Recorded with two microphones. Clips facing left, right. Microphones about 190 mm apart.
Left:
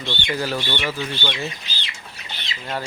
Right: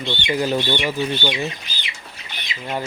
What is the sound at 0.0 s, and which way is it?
Speech, 15° right (ahead or behind).